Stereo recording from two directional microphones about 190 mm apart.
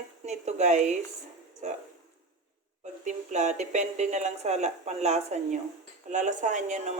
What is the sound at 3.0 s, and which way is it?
Speech, 40° right (ahead or behind).